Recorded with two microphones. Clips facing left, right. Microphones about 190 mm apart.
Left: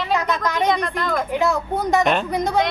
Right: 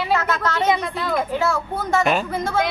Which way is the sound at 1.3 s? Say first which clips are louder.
Left 2 dB; 15° left (ahead or behind).